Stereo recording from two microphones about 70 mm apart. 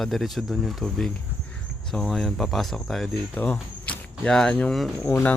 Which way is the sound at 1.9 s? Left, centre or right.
Centre.